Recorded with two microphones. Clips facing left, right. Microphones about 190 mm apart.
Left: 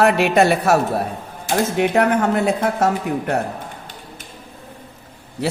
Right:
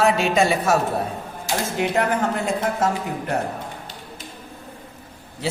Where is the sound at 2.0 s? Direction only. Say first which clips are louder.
Left 5 dB; 65° left (ahead or behind).